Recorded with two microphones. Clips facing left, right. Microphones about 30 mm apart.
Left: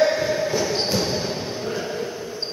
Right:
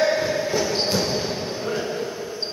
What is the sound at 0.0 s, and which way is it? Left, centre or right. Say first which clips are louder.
Basketball bounce: left 1 dB; centre.